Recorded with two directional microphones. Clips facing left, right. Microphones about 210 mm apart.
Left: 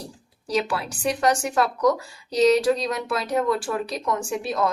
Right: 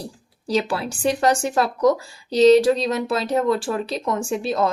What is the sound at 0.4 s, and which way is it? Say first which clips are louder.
Speech: right 3 dB; 30° right (ahead or behind).